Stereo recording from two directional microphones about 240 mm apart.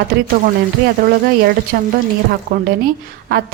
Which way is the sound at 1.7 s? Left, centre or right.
Right.